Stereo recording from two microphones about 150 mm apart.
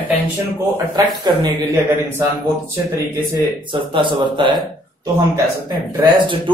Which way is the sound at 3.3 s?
30° right (ahead or behind).